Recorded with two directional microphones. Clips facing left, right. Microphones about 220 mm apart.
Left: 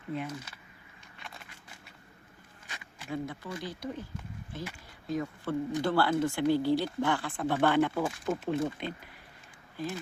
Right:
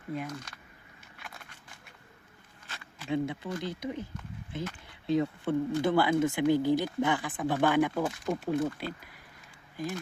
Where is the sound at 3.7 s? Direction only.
20° right (ahead or behind).